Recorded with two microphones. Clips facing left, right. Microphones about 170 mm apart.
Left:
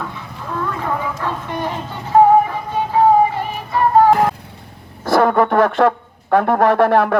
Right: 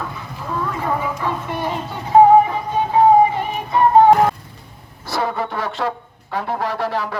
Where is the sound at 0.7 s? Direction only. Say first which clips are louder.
Right 1 dB; 10° right (ahead or behind).